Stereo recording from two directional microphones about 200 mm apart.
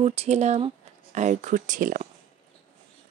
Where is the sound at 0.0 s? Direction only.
30° right (ahead or behind).